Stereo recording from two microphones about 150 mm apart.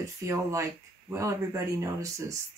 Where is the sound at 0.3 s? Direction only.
20° right (ahead or behind).